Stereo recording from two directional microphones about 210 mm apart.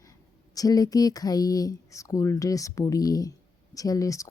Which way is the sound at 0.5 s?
15° left (ahead or behind).